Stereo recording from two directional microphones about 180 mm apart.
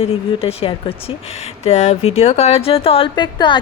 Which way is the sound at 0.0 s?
35° left (ahead or behind).